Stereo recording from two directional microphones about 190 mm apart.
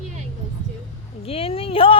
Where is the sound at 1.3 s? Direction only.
30° left (ahead or behind).